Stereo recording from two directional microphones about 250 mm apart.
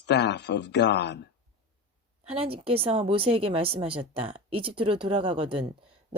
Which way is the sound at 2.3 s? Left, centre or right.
Right.